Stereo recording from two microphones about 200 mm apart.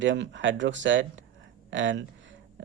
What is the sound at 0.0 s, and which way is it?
Speech, 65° right (ahead or behind).